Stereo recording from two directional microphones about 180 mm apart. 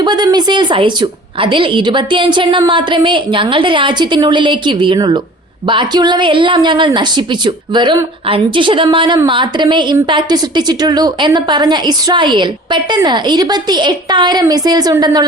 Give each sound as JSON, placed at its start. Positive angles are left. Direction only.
{"t": 0.0, "sound": "a woman's voice", "side_deg": -25}